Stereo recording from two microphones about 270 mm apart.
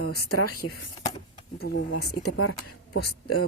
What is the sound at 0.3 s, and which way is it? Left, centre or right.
Speech, left.